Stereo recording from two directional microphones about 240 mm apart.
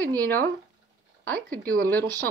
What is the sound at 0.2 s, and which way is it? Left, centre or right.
Speech, centre.